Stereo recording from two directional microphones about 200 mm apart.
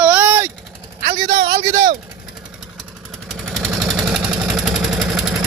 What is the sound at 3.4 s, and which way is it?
Vehicle, centre (ahead or behind).